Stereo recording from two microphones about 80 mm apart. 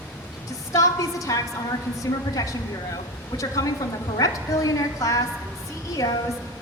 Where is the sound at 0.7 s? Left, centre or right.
Left.